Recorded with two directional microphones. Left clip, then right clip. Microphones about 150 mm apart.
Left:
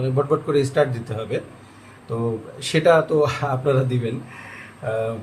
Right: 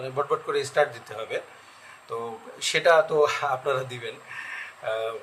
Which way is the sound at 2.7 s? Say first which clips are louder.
Left 3 dB; 25° right (ahead or behind).